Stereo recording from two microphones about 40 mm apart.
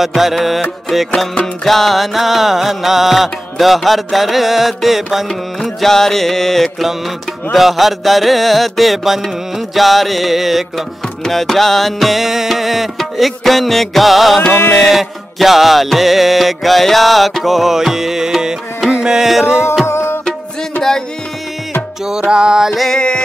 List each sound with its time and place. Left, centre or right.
0.0 s music: centre
5.6 s music: centre
11.2 s music: centre
22.0 s music: centre
22.8 s music: left